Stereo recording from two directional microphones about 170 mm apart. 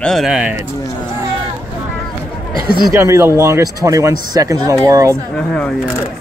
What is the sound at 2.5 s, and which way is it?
Speech, 60° right (ahead or behind).